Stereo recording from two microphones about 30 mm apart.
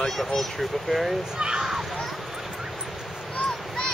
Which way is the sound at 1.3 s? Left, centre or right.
Right.